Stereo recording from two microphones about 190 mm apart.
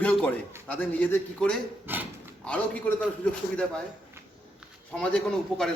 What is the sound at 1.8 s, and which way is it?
Speech, 10° right (ahead or behind).